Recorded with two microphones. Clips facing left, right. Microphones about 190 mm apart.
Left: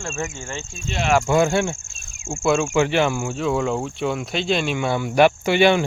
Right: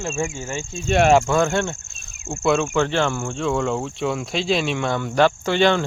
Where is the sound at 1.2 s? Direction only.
10° left (ahead or behind).